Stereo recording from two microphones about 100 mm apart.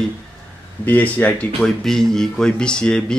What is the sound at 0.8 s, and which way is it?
Speech, 15° left (ahead or behind).